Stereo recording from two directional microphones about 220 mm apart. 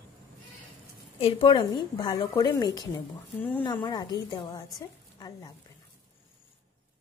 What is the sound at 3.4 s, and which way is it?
Speech, 10° left (ahead or behind).